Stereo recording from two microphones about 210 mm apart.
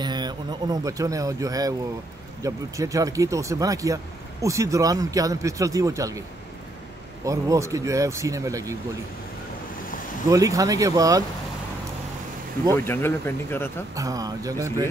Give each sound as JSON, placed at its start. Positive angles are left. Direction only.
{"t": 0.0, "sound": "speech", "side_deg": -20}
{"t": 7.2, "sound": "speech", "side_deg": -15}
{"t": 10.3, "sound": "speech", "side_deg": -15}
{"t": 12.7, "sound": "speech", "side_deg": 10}
{"t": 13.9, "sound": "speech", "side_deg": -15}